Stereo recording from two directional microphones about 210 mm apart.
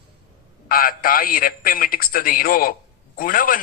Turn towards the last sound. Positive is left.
turn(degrees=40)  # may be behind; listen again after turning